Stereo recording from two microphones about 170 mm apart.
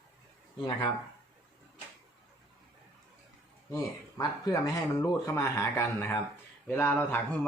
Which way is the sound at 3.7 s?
20° left (ahead or behind).